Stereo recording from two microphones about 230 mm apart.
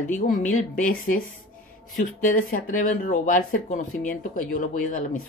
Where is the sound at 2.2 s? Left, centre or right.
Left.